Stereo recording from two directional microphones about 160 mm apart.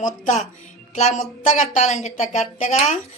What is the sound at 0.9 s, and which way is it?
A woman's voice, 45° left (ahead or behind).